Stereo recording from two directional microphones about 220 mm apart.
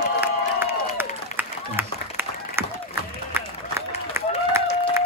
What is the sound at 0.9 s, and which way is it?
Applause, 10° right (ahead or behind).